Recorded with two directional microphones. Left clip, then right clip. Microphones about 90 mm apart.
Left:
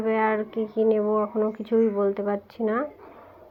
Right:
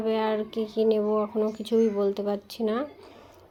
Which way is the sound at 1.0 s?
10° right (ahead or behind).